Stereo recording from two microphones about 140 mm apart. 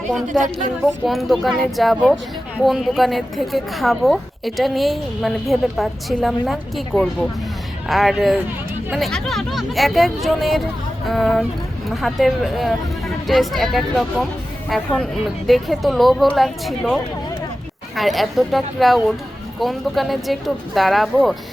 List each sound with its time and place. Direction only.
0.3 s a woman's voice: 65° right (ahead or behind)
1.0 s a woman's voice: centre (ahead or behind)
7.9 s a woman's voice: centre (ahead or behind)